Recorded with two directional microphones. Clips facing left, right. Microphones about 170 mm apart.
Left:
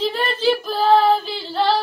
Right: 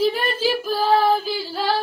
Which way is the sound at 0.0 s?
10° right (ahead or behind).